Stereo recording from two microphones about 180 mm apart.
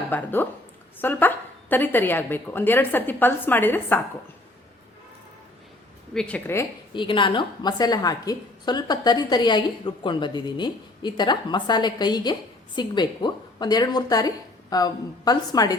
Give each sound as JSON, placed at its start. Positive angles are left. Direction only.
{"t": 0.1, "sound": "a woman's voice", "side_deg": 10}
{"t": 6.1, "sound": "a woman's voice", "side_deg": 5}
{"t": 6.9, "sound": "a woman's voice", "side_deg": 25}